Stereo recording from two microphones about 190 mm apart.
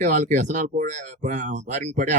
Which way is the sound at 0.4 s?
40° right (ahead or behind).